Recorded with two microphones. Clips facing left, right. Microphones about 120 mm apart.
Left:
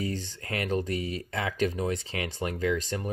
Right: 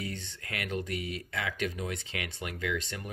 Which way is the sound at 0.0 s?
35° left (ahead or behind).